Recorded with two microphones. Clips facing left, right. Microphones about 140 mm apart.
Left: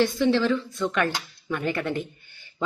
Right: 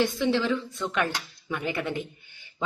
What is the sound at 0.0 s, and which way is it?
Speech, 15° right (ahead or behind).